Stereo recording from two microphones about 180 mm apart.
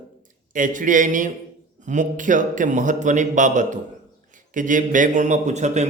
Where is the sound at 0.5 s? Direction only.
45° right (ahead or behind).